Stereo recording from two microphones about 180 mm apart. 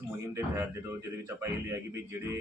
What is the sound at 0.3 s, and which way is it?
Speech, 15° right (ahead or behind).